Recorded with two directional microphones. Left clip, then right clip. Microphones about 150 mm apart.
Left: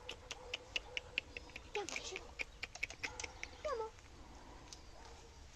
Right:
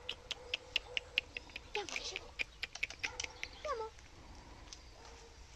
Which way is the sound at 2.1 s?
10° left (ahead or behind).